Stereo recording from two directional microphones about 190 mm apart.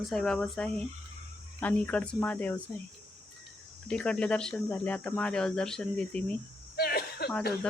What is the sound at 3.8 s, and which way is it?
Speech, 5° left (ahead or behind).